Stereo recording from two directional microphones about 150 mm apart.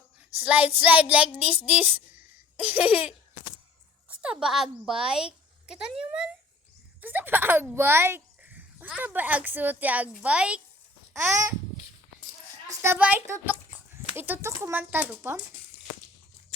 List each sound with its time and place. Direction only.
0.3 s a woman's voice: 10° right (ahead or behind)
4.1 s a woman's voice: 5° right (ahead or behind)
11.1 s babbling: 15° right (ahead or behind)
12.6 s a sound: 15° right (ahead or behind)
14.2 s a woman's voice: 15° right (ahead or behind)